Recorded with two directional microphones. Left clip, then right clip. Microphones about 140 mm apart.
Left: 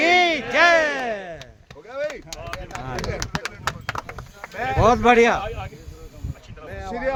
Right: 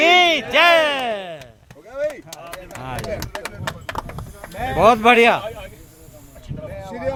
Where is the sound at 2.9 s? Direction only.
15° left (ahead or behind).